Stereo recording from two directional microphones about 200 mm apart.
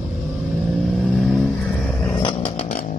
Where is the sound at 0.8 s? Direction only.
Centre (ahead or behind).